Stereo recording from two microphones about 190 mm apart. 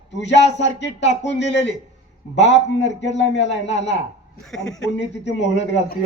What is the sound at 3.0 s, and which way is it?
Speech, 70° left (ahead or behind).